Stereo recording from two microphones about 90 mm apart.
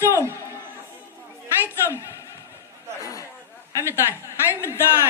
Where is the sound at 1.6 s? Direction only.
30° left (ahead or behind).